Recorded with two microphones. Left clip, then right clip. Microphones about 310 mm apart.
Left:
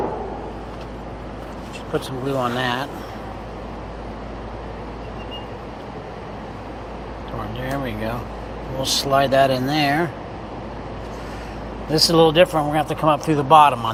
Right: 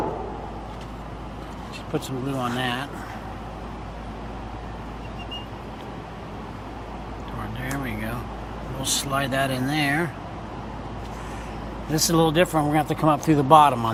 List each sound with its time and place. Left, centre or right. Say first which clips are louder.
1.9 s speech: left 5 dB; centre
7.6 s speech: left 5 dB; centre
11.9 s speech: left 6 dB; centre